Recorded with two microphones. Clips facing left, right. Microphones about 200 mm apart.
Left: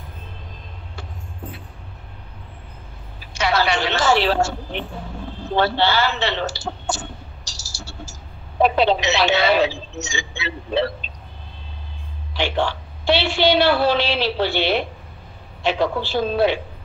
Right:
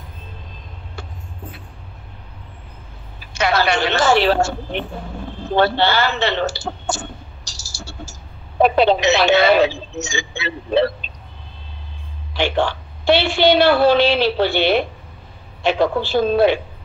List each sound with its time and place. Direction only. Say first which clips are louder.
3.3 s a woman's voice: right 2 dB; 50° right (ahead or behind)
12.4 s a woman's voice: right 3 dB; 50° right (ahead or behind)